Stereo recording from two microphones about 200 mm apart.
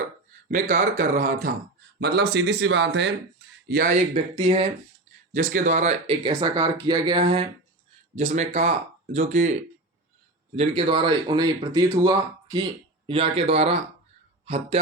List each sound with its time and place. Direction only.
0.4 s speech: 40° right (ahead or behind)
2.0 s speech: 55° right (ahead or behind)
4.1 s speech: 30° right (ahead or behind)
5.3 s speech: 40° right (ahead or behind)
10.5 s speech: 30° right (ahead or behind)